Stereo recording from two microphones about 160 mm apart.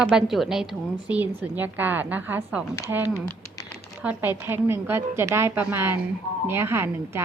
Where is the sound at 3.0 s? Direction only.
25° left (ahead or behind).